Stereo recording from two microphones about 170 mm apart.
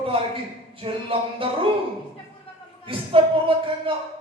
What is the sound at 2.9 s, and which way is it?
Speech, 30° right (ahead or behind).